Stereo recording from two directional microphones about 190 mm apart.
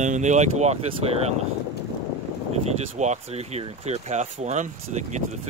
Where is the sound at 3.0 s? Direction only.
35° right (ahead or behind).